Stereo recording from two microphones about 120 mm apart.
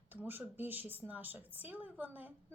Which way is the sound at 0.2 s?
15° right (ahead or behind).